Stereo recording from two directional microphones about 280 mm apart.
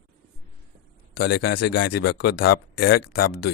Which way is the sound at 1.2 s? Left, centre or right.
Left.